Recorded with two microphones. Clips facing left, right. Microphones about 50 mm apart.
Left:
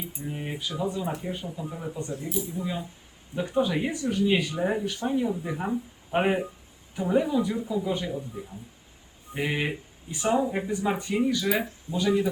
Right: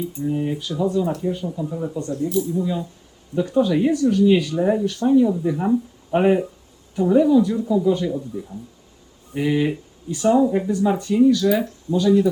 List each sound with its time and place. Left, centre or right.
0.0 s speech: centre
5.6 s speech: centre
6.1 s speech: centre